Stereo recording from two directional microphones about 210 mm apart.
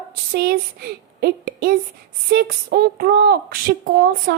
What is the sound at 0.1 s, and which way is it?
A woman's voice, 50° right (ahead or behind).